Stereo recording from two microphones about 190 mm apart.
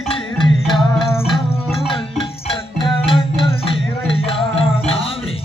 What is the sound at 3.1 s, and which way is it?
Music, 25° left (ahead or behind).